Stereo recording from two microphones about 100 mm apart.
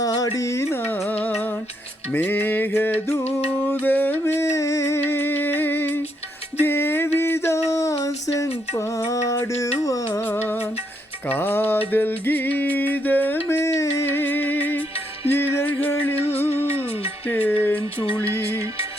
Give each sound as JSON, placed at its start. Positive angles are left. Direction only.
{"t": 0.0, "sound": "music", "side_deg": 35}
{"t": 2.1, "sound": "mantra", "side_deg": 20}
{"t": 3.5, "sound": "music", "side_deg": 20}
{"t": 6.6, "sound": "a sound", "side_deg": 20}
{"t": 8.7, "sound": "mantra", "side_deg": 30}
{"t": 10.1, "sound": "music", "side_deg": 20}
{"t": 16.6, "sound": "music", "side_deg": 80}
{"t": 17.2, "sound": "music", "side_deg": 15}